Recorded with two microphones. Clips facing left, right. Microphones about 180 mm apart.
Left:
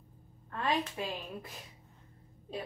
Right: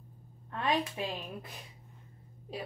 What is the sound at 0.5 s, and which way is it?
A woman's voice, 20° right (ahead or behind).